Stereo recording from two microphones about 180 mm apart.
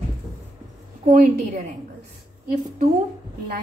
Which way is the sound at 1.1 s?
45° right (ahead or behind).